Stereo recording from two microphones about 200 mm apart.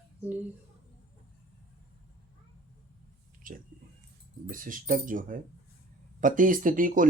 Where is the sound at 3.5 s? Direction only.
45° right (ahead or behind).